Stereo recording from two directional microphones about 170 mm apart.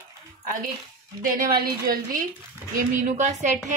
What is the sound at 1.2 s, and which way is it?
A woman's voice, 55° right (ahead or behind).